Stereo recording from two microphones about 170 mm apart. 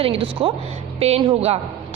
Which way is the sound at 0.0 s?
30° right (ahead or behind).